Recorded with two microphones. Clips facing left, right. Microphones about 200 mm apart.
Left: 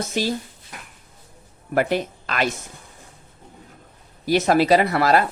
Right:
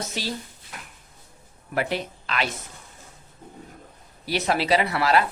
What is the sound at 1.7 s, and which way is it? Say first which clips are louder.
Speech: left 6 dB; 50° left (ahead or behind).